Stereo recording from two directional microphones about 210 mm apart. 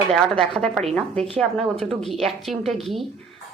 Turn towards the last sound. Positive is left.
turn(degrees=0)  # may be behind; listen again after turning